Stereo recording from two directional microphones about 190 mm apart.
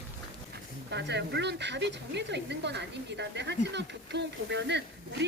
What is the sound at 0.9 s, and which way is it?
Speech, 65° right (ahead or behind).